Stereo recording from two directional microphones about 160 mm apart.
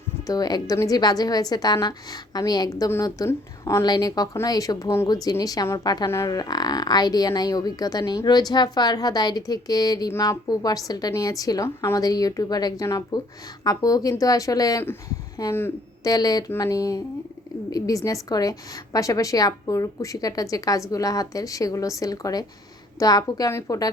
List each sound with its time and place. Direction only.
0.3 s a woman's voice: 25° left (ahead or behind)